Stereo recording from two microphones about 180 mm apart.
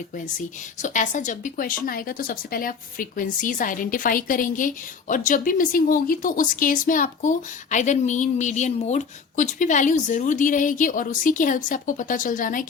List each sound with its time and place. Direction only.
0.3 s a woman's voice: 45° left (ahead or behind)